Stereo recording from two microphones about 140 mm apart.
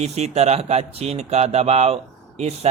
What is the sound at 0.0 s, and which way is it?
Speech, 50° right (ahead or behind).